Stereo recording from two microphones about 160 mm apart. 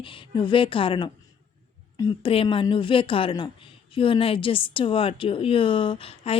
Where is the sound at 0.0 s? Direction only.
30° left (ahead or behind).